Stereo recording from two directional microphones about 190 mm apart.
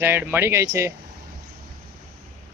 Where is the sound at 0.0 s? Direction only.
10° right (ahead or behind).